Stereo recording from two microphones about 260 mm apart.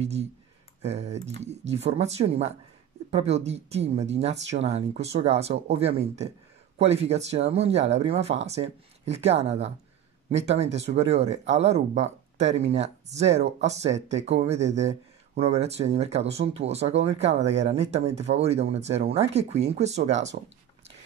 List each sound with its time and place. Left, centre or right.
0.0 s speech: right